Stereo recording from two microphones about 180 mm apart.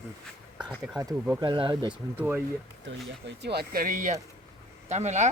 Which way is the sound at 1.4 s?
25° right (ahead or behind).